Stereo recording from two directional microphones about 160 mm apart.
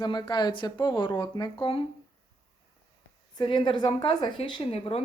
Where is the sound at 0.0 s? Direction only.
25° left (ahead or behind).